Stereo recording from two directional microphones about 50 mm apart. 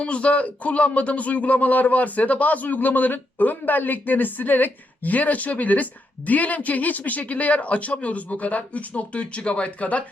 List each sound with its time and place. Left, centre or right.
0.0 s speech: left